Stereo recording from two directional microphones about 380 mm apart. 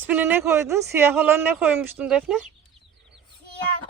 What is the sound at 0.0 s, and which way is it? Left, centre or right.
Speech, centre.